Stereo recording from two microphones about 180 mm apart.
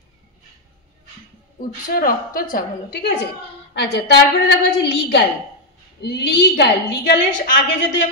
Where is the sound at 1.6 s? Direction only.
50° left (ahead or behind).